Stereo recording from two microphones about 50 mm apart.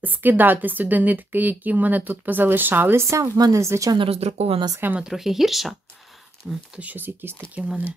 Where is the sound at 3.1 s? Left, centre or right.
Right.